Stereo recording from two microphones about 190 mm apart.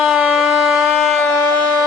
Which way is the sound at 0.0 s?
5° right (ahead or behind).